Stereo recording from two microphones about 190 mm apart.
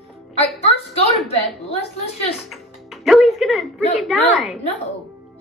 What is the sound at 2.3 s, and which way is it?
Music, centre (ahead or behind).